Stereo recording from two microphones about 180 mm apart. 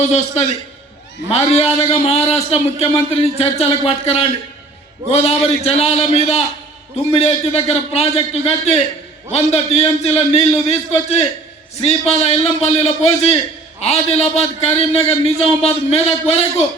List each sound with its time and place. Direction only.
0.1 s a man's voice: 35° left (ahead or behind)